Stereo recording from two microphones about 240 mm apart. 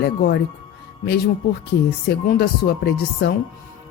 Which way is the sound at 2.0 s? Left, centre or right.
Left.